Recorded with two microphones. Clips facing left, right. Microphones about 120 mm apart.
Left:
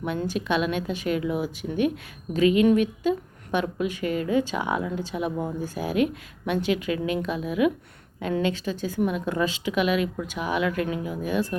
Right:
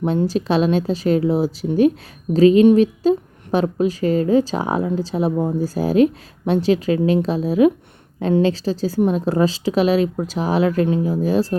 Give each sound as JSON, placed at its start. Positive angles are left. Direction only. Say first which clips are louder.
{"t": 0.0, "sound": "a woman's voice", "louder": "right 8 dB", "side_deg": -35}